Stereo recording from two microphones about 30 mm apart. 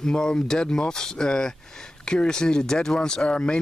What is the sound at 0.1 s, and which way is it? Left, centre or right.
Speech, left.